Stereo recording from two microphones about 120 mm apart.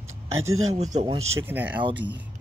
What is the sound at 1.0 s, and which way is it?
Speech, 55° right (ahead or behind).